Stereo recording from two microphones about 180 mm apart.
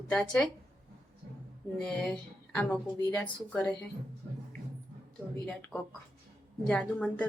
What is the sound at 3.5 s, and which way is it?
Speech, 5° left (ahead or behind).